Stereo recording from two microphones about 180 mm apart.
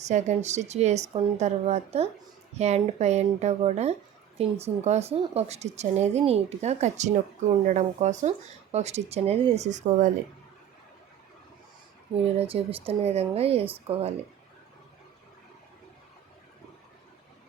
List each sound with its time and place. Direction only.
0.0 s speech: 40° right (ahead or behind)
12.4 s speech: 30° right (ahead or behind)